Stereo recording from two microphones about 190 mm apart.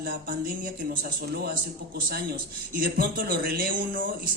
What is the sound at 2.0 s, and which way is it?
Speech, 50° right (ahead or behind).